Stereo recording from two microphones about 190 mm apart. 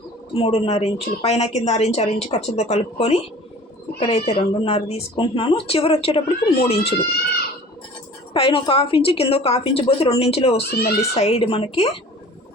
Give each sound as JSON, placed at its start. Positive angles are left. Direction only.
{"t": 0.3, "sound": "a woman's voice", "side_deg": 30}
{"t": 8.3, "sound": "a woman's voice", "side_deg": 25}
{"t": 10.6, "sound": "speech", "side_deg": 55}
{"t": 11.1, "sound": "a woman's voice", "side_deg": 30}